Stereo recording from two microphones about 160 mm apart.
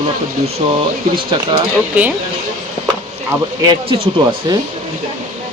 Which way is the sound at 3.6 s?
25° right (ahead or behind).